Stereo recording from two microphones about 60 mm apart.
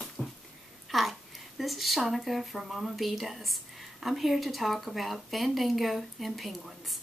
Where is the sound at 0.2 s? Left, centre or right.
Left.